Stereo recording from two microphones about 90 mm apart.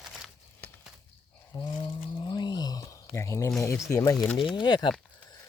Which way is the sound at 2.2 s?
55° left (ahead or behind).